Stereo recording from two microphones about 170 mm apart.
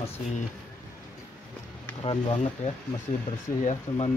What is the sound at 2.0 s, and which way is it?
Speech, 30° left (ahead or behind).